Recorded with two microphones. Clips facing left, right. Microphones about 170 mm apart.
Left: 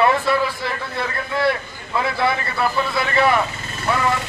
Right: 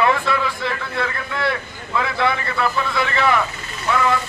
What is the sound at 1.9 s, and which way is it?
A man's voice, 30° left (ahead or behind).